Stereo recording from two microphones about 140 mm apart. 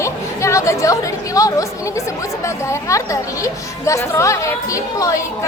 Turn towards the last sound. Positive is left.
turn(degrees=25)  # may be behind; listen again after turning